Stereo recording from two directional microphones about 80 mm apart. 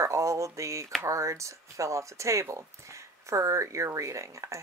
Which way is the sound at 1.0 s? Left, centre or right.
Right.